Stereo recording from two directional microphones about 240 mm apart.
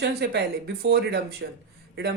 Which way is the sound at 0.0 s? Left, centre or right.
Right.